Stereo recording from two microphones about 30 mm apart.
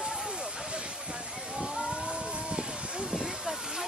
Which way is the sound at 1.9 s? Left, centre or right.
Right.